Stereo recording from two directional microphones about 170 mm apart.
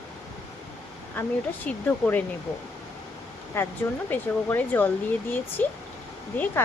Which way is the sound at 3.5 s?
15° left (ahead or behind).